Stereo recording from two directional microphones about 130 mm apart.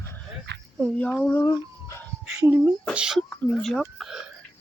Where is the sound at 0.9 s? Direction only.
15° left (ahead or behind).